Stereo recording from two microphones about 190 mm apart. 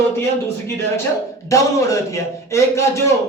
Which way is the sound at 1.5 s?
15° left (ahead or behind).